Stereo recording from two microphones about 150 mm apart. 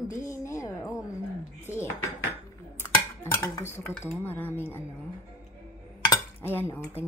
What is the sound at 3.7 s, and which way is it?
Cutlery, 15° left (ahead or behind).